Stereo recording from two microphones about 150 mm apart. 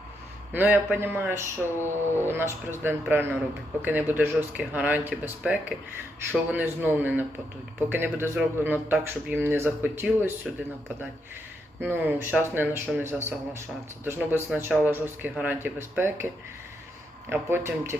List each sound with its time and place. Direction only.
0.5 s speech: 10° right (ahead or behind)
11.8 s speech: 15° right (ahead or behind)